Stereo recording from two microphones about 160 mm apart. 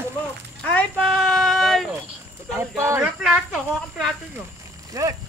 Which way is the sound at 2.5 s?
15° right (ahead or behind).